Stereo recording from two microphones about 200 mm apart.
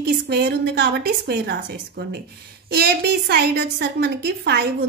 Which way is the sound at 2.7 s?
50° right (ahead or behind).